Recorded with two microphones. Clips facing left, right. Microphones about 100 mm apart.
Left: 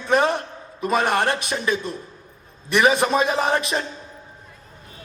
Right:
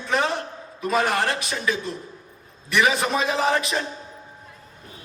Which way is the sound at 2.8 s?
30° left (ahead or behind).